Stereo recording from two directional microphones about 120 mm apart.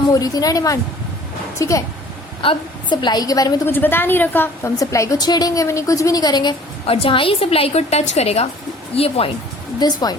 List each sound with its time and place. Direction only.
0.1 s a woman's voice: 30° left (ahead or behind)
2.4 s a woman's voice: 45° left (ahead or behind)
3.7 s a woman's voice: 15° left (ahead or behind)
4.8 s a woman's voice: 25° left (ahead or behind)
6.8 s a woman's voice: 50° left (ahead or behind)
9.8 s a woman's voice: 35° left (ahead or behind)